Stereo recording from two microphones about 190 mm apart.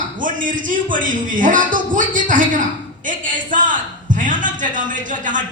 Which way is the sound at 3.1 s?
45° right (ahead or behind).